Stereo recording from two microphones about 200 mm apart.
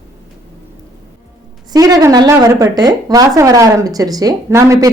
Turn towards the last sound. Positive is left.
turn(degrees=-15)  # may be behind; listen again after turning